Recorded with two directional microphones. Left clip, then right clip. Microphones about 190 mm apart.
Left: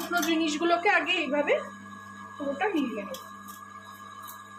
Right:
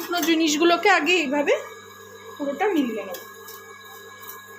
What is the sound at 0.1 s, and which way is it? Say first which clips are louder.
A woman's voice: right 6 dB; 35° right (ahead or behind).